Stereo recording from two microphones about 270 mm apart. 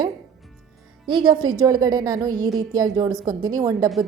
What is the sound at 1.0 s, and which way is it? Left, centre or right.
A woman's voice, centre.